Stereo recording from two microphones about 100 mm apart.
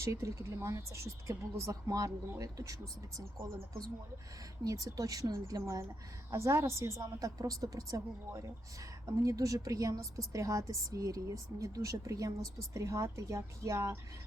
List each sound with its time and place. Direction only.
0.0 s a woman's voice: 30° right (ahead or behind)
4.6 s a woman's voice: 35° right (ahead or behind)
9.0 s a woman's voice: 35° right (ahead or behind)